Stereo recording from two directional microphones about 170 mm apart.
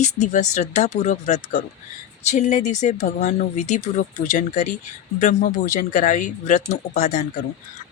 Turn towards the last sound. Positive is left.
turn(degrees=45)  # may be behind; listen again after turning